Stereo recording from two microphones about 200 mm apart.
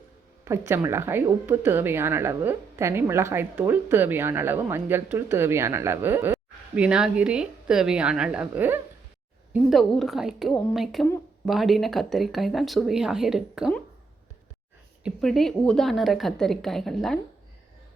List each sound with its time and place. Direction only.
0.4 s a woman's voice: 15° right (ahead or behind)
15.0 s speech: centre (ahead or behind)